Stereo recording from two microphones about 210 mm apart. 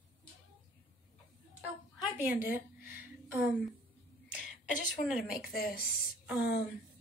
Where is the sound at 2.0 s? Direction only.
5° right (ahead or behind).